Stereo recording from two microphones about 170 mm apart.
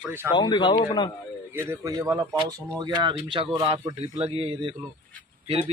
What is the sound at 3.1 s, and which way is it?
Speech, 30° right (ahead or behind).